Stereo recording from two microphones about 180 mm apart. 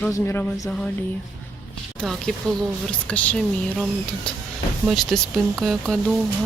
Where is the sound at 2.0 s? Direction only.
5° left (ahead or behind).